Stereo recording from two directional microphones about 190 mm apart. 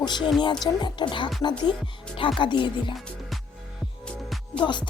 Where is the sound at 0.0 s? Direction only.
25° left (ahead or behind).